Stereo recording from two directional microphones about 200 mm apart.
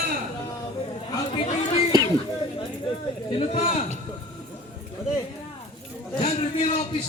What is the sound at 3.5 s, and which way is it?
Speech, 35° left (ahead or behind).